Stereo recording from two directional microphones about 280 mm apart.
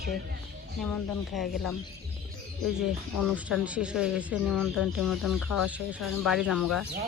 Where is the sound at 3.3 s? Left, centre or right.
Centre.